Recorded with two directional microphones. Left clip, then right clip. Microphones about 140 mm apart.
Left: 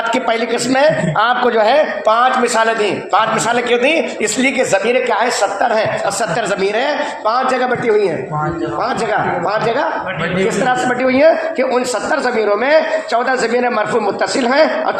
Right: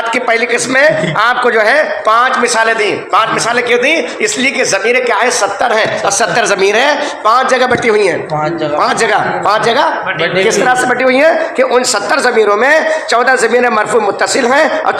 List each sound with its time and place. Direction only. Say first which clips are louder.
0.3 s a man's voice: right 4 dB; 25° left (ahead or behind)
6.3 s a man's voice: right 6 dB; 5° left (ahead or behind)
9.5 s a man's voice: right 9 dB; centre (ahead or behind)